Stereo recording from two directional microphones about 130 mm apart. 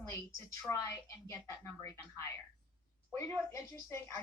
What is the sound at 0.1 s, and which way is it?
A woman's voice, 25° left (ahead or behind).